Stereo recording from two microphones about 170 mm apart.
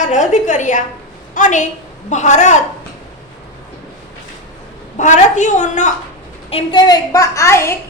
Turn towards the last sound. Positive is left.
turn(degrees=15)  # may be behind; listen again after turning